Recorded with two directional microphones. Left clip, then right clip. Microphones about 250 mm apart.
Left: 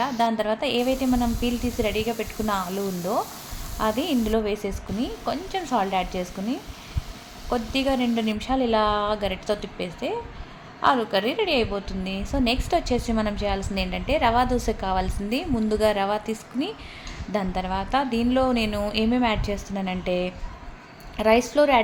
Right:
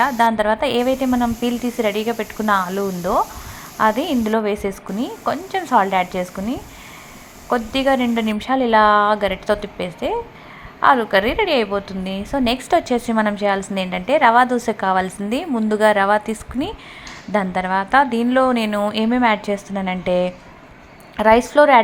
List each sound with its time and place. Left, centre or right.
0.0 s a woman's voice: centre